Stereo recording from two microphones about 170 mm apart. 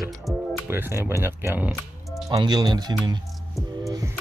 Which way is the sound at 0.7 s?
15° right (ahead or behind).